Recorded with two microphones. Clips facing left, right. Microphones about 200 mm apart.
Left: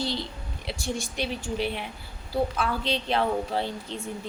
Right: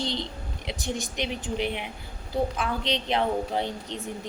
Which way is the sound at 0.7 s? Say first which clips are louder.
Even; 20° right (ahead or behind).